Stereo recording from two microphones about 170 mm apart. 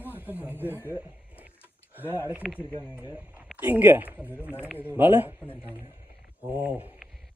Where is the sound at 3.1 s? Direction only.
5° right (ahead or behind).